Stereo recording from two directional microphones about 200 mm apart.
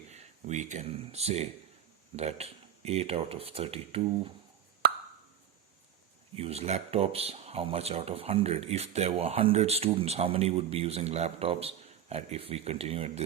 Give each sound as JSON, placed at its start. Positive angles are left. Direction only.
{"t": 0.1, "sound": "a sound", "side_deg": -35}
{"t": 2.1, "sound": "speech", "side_deg": -30}
{"t": 6.3, "sound": "speech", "side_deg": -30}